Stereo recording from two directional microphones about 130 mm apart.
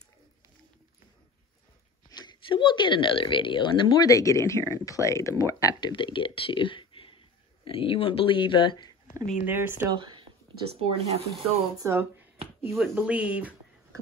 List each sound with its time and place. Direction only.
2.0 s speech: 35° left (ahead or behind)
5.9 s speech: 40° left (ahead or behind)
9.5 s speech: 15° right (ahead or behind)
9.8 s speech: 35° right (ahead or behind)
10.9 s speech: 50° right (ahead or behind)
11.8 s speech: 20° right (ahead or behind)